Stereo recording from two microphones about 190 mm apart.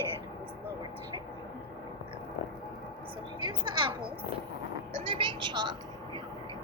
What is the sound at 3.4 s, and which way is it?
Speech, 25° right (ahead or behind).